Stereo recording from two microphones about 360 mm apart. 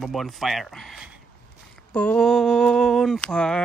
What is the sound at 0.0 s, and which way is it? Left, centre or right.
Mantra, centre.